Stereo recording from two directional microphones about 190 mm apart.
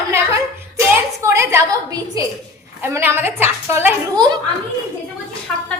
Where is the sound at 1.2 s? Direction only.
15° right (ahead or behind).